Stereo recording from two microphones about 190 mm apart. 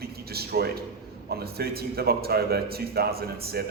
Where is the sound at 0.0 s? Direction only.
55° right (ahead or behind).